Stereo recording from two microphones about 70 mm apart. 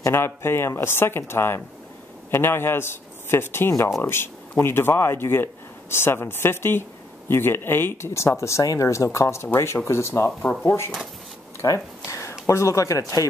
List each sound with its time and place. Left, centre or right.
0.0 s speech: left
11.6 s speech: left
12.1 s speech: left